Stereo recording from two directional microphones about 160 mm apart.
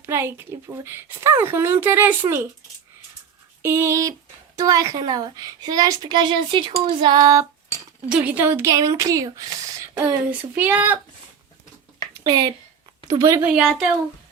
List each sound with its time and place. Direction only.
0.0 s speech: 15° right (ahead or behind)
3.6 s a woman's voice: 15° right (ahead or behind)
8.1 s speech: 10° right (ahead or behind)
12.2 s a woman's voice: 25° right (ahead or behind)
13.4 s a woman's voice: 5° right (ahead or behind)